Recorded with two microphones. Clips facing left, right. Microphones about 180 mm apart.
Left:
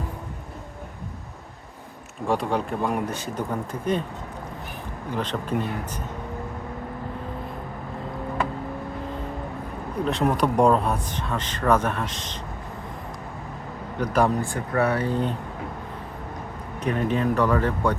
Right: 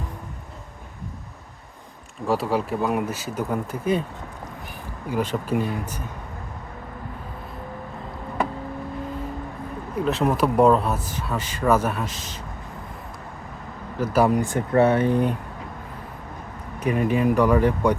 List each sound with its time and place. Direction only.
2.2 s speech: 5° right (ahead or behind)
5.1 s speech: 10° right (ahead or behind)
10.0 s speech: 5° right (ahead or behind)
14.0 s speech: 5° right (ahead or behind)
16.8 s speech: 10° right (ahead or behind)